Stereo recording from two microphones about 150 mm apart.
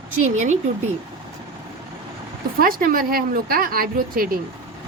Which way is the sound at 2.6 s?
70° right (ahead or behind).